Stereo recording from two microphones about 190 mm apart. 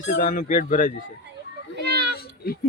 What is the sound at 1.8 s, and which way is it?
Children playing, 60° right (ahead or behind).